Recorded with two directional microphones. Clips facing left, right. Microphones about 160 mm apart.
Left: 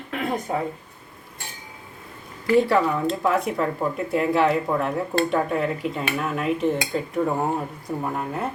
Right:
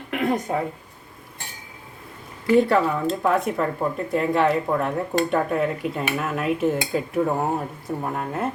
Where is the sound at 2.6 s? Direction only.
Centre (ahead or behind).